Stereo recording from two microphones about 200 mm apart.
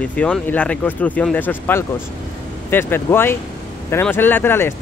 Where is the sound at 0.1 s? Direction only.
5° left (ahead or behind).